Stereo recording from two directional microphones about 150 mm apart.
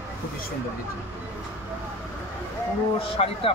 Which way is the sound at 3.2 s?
45° left (ahead or behind).